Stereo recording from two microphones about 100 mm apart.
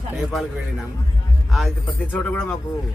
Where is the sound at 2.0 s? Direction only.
15° left (ahead or behind).